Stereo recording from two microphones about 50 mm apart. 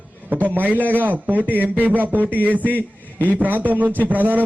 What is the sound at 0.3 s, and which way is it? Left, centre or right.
A man's voice, right.